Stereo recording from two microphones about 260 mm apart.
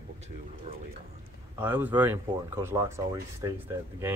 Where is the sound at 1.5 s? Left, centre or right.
Centre.